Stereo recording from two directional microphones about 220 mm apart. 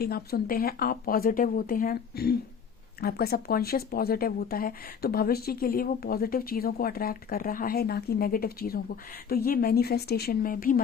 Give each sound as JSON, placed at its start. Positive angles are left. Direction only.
{"t": 0.0, "sound": "speech", "side_deg": 45}